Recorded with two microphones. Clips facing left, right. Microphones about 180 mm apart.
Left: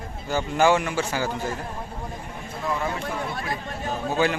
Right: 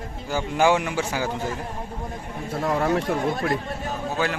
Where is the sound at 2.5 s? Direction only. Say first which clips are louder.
Right 6 dB; 70° right (ahead or behind).